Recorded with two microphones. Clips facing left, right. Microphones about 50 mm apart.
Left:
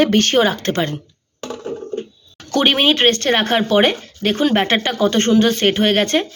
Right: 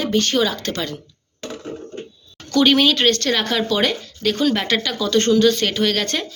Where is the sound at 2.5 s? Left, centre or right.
Left.